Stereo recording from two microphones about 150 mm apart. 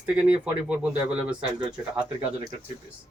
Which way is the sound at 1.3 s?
30° right (ahead or behind).